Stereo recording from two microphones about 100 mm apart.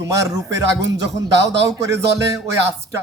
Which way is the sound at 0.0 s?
35° right (ahead or behind).